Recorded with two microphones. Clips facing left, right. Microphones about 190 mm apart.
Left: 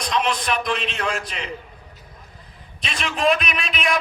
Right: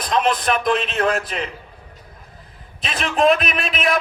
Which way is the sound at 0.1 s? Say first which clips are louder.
Right 4 dB; 45° right (ahead or behind).